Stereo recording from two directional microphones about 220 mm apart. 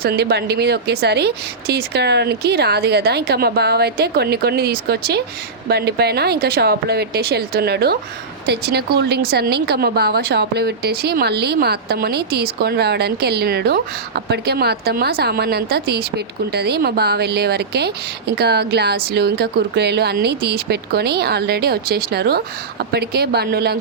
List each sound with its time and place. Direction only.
0.0 s speech: 45° right (ahead or behind)